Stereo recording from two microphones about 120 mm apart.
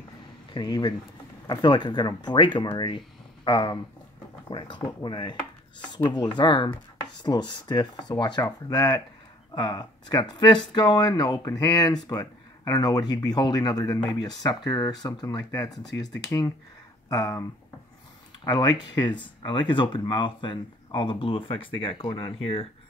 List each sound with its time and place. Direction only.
0.5 s speech: 35° left (ahead or behind); by 22.7 s 50° left (ahead or behind)